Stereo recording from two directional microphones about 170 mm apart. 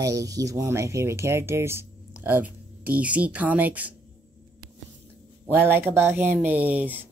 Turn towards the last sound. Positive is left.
turn(degrees=-10)  # may be behind; listen again after turning